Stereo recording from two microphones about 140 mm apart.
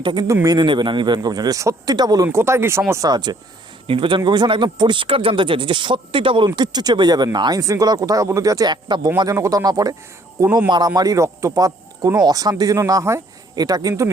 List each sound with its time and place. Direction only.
0.0 s speech: 35° right (ahead or behind)